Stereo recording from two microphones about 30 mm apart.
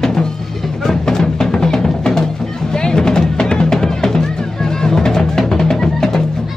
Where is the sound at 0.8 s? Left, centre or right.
Centre.